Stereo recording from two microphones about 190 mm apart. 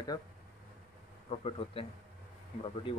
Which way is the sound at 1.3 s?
30° left (ahead or behind).